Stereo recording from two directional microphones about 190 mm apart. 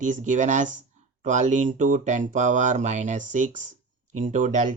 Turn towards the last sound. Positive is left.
turn(degrees=-40)  # may be behind; listen again after turning